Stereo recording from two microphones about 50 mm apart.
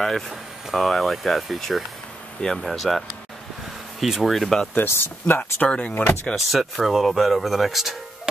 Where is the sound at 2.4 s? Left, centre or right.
Centre.